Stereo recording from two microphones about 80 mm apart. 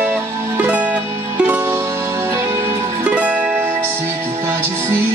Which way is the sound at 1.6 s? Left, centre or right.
Right.